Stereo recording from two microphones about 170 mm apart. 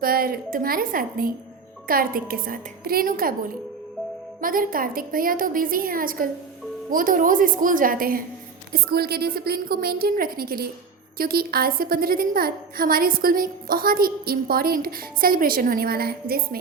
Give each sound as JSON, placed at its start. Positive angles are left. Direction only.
{"t": 0.0, "sound": "a woman's voice", "side_deg": -60}